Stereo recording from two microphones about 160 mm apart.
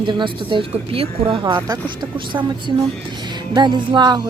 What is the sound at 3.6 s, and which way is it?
Speech, 25° right (ahead or behind).